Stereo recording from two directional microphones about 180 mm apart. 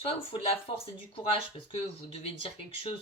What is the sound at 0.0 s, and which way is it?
Speech, 30° left (ahead or behind).